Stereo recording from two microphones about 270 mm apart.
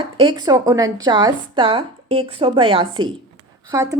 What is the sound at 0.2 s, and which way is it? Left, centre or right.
A woman's voice, centre.